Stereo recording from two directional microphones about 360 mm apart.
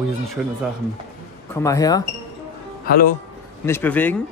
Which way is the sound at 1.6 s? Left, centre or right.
Centre.